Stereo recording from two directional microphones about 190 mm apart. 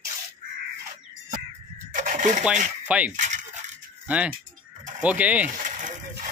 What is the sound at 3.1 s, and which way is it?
Rattle, 40° right (ahead or behind).